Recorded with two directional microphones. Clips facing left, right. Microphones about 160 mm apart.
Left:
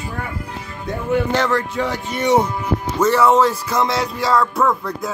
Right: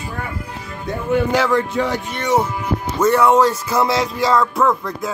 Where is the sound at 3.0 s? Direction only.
Centre (ahead or behind).